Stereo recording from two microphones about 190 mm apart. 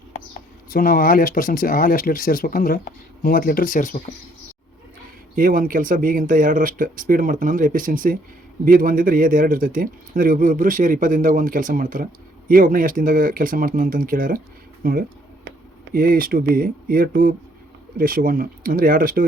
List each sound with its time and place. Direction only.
0.7 s speech: 50° left (ahead or behind)
5.4 s a man's voice: 45° right (ahead or behind)